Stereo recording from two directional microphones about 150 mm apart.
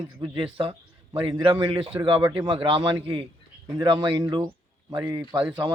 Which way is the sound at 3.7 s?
25° right (ahead or behind).